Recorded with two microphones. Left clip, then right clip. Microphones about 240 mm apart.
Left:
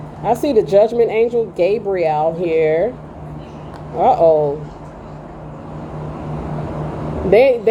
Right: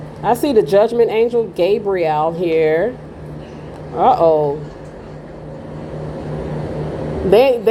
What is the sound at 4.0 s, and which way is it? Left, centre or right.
Speech, right.